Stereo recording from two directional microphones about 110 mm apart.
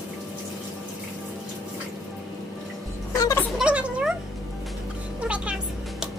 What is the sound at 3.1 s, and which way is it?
Music, 30° left (ahead or behind).